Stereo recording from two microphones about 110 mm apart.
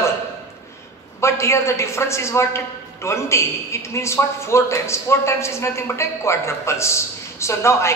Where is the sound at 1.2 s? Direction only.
25° left (ahead or behind).